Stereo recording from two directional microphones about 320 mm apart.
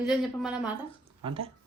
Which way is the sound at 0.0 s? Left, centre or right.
Centre.